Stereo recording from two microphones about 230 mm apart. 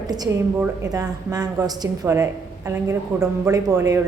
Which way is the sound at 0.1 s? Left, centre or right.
Centre.